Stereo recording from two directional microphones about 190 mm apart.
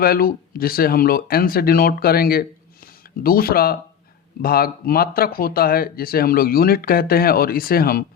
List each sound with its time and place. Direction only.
0.0 s speech: 50° left (ahead or behind)